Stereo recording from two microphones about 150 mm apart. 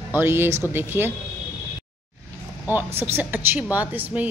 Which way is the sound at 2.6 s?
10° right (ahead or behind).